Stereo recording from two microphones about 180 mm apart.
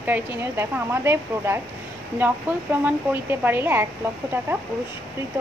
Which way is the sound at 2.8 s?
10° right (ahead or behind).